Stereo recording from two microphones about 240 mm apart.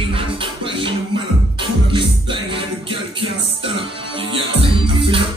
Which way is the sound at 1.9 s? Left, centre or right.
Right.